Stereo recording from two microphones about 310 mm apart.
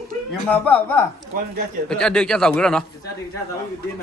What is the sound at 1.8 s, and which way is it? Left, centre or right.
Speech, centre.